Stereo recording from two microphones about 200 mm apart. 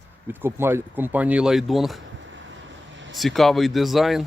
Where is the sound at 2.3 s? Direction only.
70° right (ahead or behind).